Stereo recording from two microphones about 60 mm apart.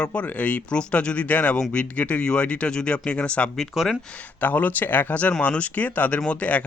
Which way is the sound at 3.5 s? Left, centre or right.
Centre.